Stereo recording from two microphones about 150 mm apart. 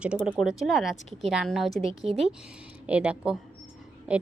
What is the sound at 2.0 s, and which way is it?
Speech, 45° right (ahead or behind).